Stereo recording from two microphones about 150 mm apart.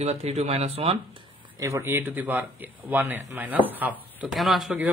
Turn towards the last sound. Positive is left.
turn(degrees=-5)  # may be behind; listen again after turning